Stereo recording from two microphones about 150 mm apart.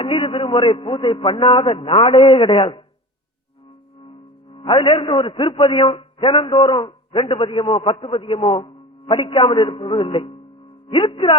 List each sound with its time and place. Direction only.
0.0 s a man's voice: 35° left (ahead or behind)
4.5 s a man's voice: 35° left (ahead or behind)